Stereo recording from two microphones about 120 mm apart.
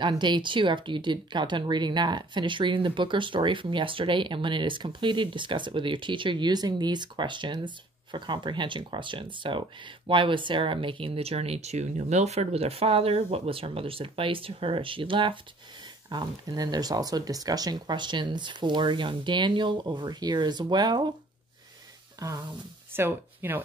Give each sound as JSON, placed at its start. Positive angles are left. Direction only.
{"t": 0.2, "sound": "speech", "side_deg": -40}
{"t": 16.1, "sound": "speech", "side_deg": -35}
{"t": 22.2, "sound": "speech", "side_deg": -35}
{"t": 22.9, "sound": "speech", "side_deg": -20}